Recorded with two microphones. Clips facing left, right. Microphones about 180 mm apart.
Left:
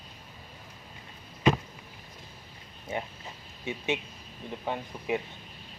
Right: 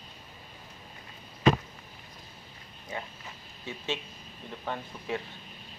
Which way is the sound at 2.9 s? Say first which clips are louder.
Left 4 dB; 25° left (ahead or behind).